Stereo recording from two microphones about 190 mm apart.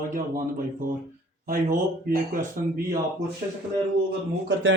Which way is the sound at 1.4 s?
50° right (ahead or behind).